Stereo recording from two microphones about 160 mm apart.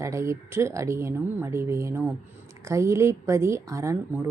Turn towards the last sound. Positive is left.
turn(degrees=-20)  # may be behind; listen again after turning